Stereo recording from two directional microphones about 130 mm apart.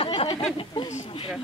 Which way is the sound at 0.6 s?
35° left (ahead or behind).